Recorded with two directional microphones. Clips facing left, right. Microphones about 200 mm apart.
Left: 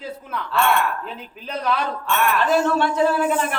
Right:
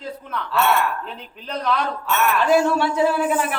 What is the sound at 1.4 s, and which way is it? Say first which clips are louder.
Speech: even; 5° left (ahead or behind).